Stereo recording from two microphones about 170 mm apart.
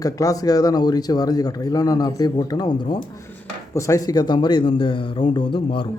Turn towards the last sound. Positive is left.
turn(degrees=30)  # may be behind; listen again after turning